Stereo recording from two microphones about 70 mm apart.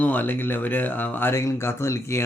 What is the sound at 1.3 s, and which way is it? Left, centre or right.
Speech, left.